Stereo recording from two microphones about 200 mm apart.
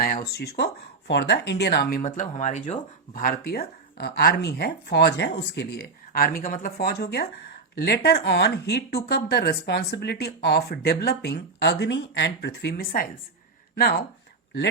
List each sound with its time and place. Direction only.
0.0 s speech: 50° left (ahead or behind)
2.0 s speech: 35° left (ahead or behind)